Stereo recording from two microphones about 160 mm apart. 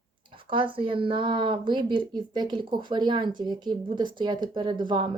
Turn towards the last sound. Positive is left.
turn(degrees=-30)  # may be behind; listen again after turning